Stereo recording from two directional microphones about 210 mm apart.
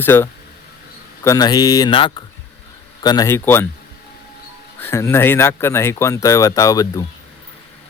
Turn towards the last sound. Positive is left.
turn(degrees=15)  # may be behind; listen again after turning